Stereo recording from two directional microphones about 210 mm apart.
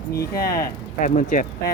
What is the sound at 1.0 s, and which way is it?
Speech, 40° left (ahead or behind).